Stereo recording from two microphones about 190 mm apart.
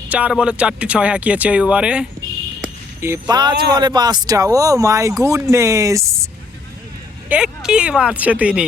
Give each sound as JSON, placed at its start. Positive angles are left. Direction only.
{"t": 0.1, "sound": "speech", "side_deg": -5}
{"t": 2.6, "sound": "a sound", "side_deg": -15}
{"t": 3.8, "sound": "speech", "side_deg": -20}
{"t": 7.3, "sound": "speech", "side_deg": -5}